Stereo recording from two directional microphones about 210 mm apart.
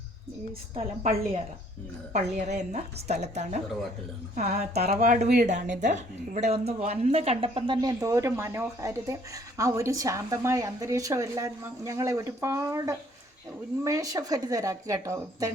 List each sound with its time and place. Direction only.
0.8 s a woman's voice: 30° right (ahead or behind)
4.7 s a woman's voice: 30° right (ahead or behind); by 15.5 s 15° right (ahead or behind)